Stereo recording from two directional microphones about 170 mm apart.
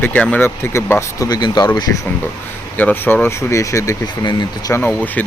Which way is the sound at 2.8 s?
10° left (ahead or behind).